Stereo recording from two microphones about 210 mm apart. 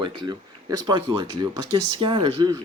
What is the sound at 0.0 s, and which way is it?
Speech, 20° right (ahead or behind).